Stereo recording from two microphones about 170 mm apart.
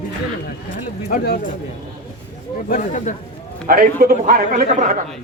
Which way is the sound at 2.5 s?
50° left (ahead or behind).